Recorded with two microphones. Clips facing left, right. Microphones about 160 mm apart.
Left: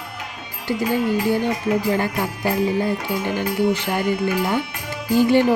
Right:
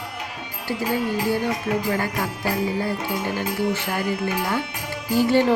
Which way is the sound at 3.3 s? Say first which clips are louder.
Left 6 dB; 20° left (ahead or behind).